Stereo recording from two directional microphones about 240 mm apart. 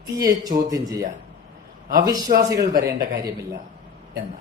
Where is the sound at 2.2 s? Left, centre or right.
Right.